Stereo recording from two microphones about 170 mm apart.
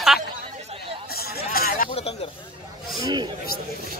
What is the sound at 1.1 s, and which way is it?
Hubbub, 65° left (ahead or behind).